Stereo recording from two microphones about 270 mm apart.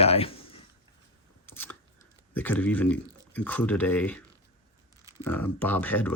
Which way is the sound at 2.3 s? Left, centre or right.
Centre.